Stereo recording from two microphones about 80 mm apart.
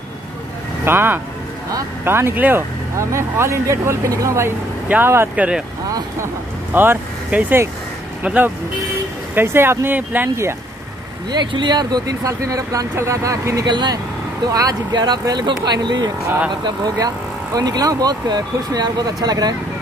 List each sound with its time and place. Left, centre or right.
0.8 s speech: right
3.0 s speech: right
4.8 s speech: right
6.2 s speech: right
7.2 s speech: centre
9.3 s speech: right
11.3 s speech: right
13.7 s speech: right
14.5 s speech: right